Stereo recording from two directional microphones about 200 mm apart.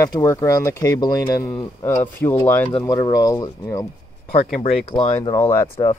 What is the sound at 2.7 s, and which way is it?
Speech, 20° left (ahead or behind).